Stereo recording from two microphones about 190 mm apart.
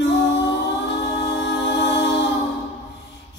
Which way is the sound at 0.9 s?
60° left (ahead or behind).